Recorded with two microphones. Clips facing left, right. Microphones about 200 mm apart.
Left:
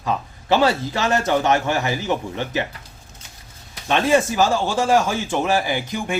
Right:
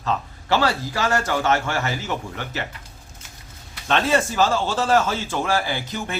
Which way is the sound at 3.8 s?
10° left (ahead or behind).